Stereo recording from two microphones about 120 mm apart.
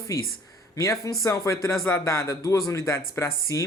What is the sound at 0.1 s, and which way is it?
Speech, 30° left (ahead or behind).